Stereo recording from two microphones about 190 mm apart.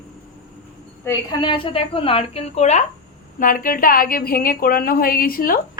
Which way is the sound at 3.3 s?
45° left (ahead or behind).